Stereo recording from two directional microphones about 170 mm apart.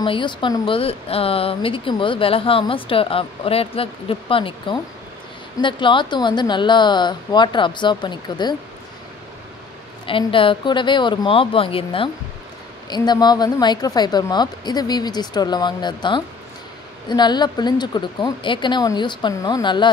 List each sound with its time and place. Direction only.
0.0 s speech: 30° left (ahead or behind)
10.0 s speech: 30° left (ahead or behind)